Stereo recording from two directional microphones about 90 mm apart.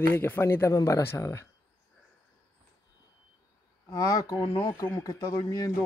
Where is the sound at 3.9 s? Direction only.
40° left (ahead or behind).